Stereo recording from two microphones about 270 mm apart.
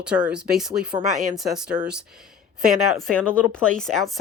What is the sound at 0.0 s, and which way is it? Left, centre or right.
A woman's voice, centre.